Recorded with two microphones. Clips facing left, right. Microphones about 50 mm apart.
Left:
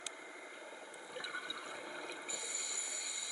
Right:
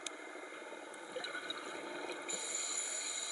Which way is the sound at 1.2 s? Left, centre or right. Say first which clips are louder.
Left 2 dB; centre.